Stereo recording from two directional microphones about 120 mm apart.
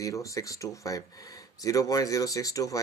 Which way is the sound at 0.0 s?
25° left (ahead or behind).